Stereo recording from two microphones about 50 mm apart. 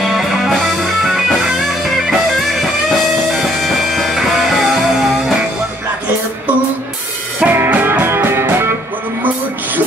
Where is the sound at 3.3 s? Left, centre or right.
Centre.